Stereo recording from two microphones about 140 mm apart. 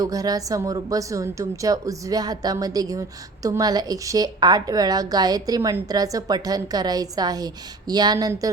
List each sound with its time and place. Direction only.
0.0 s a woman's voice: 25° right (ahead or behind)